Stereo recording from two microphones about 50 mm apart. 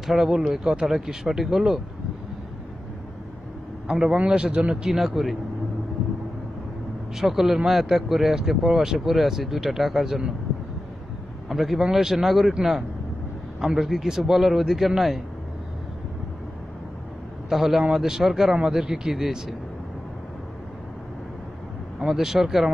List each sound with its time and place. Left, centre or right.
0.0 s a man's voice: centre
3.8 s a man's voice: centre
4.8 s speech: centre
7.2 s speech: centre
11.4 s speech: centre
13.6 s speech: centre
17.5 s a man's voice: centre
22.0 s speech: centre